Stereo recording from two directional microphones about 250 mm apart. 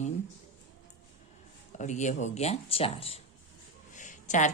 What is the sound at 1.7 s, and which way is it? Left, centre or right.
Speech, left.